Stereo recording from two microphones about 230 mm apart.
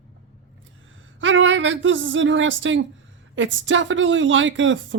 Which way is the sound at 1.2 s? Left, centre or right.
Right.